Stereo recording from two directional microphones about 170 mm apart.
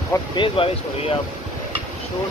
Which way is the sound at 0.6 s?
30° left (ahead or behind).